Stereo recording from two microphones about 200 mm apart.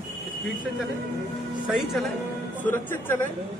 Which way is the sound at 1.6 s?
Centre (ahead or behind).